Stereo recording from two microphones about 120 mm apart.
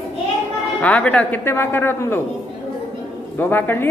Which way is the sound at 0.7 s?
10° left (ahead or behind).